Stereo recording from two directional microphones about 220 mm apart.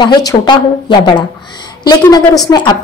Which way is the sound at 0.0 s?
20° left (ahead or behind).